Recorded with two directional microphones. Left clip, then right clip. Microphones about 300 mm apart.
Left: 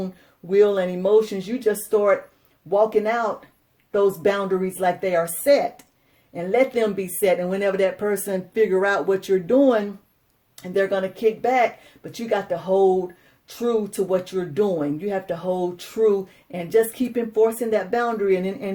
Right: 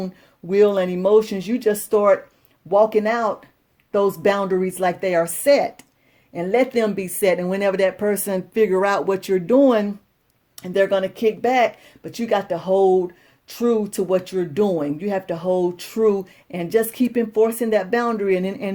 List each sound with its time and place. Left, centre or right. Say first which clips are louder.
0.0 s speech: right 1 dB; right